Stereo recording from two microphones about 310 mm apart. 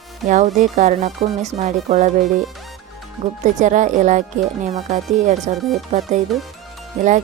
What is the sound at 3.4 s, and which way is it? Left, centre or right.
Speech, right.